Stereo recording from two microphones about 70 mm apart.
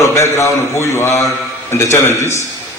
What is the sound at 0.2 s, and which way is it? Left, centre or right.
A man's voice, left.